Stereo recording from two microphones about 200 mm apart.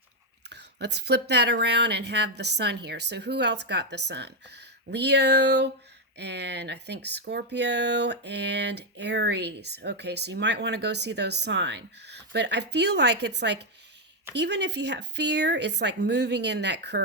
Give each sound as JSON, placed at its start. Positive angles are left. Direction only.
{"t": 0.5, "sound": "speech", "side_deg": -55}